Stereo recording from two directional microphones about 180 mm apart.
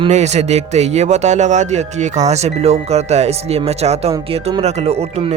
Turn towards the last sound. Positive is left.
turn(degrees=-35)  # may be behind; listen again after turning